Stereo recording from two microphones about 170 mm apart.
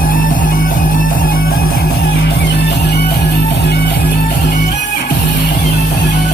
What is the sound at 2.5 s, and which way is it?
Music, 75° left (ahead or behind).